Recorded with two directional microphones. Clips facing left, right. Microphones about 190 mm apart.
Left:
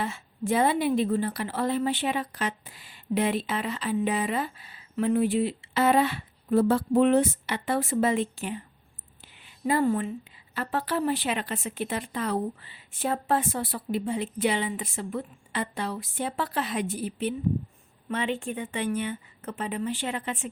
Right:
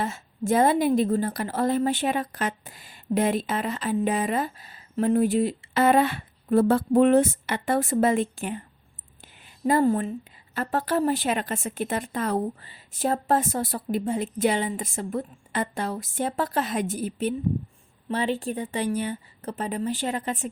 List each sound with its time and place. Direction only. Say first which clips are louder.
0.0 s a woman's voice: right 2 dB; 45° right (ahead or behind)